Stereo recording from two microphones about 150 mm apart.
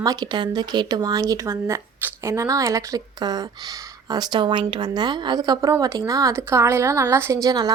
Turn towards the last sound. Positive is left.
turn(degrees=-25)  # may be behind; listen again after turning